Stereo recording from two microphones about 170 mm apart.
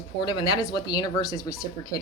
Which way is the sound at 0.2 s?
25° left (ahead or behind).